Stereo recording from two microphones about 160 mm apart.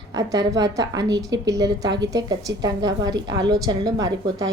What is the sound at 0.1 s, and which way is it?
A woman's voice, 20° right (ahead or behind).